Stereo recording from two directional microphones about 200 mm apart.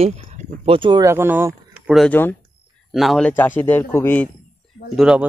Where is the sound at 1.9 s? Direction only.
5° left (ahead or behind).